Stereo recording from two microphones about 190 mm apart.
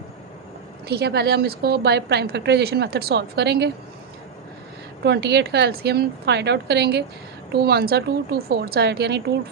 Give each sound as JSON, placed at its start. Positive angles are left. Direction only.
{"t": 0.9, "sound": "a woman's voice", "side_deg": -60}
{"t": 5.0, "sound": "a woman's voice", "side_deg": -60}